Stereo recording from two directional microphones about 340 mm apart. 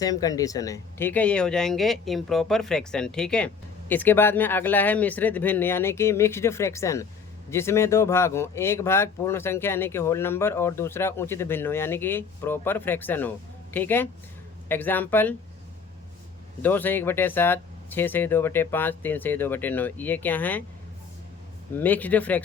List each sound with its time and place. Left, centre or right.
0.0 s speech: centre
16.6 s speech: centre
21.8 s speech: centre